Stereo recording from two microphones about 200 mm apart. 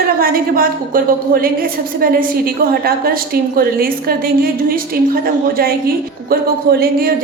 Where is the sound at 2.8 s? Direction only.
50° right (ahead or behind).